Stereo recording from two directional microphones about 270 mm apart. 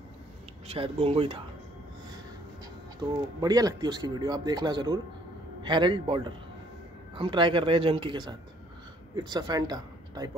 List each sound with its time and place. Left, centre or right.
0.7 s speech: right
3.0 s speech: centre